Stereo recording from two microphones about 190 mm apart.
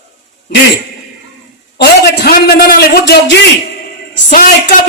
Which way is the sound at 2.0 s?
55° left (ahead or behind).